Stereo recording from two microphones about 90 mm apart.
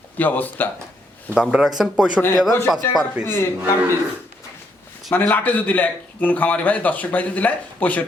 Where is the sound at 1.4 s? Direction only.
5° right (ahead or behind).